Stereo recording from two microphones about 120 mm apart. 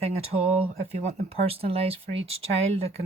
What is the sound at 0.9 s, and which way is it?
Speech, 65° right (ahead or behind).